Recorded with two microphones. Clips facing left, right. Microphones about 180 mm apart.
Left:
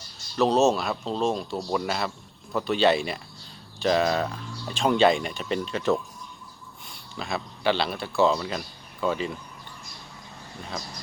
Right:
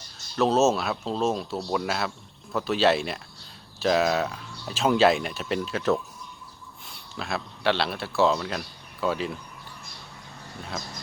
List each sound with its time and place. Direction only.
0.3 s a man's voice: centre (ahead or behind)